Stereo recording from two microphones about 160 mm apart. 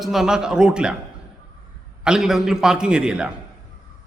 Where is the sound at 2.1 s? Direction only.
5° right (ahead or behind).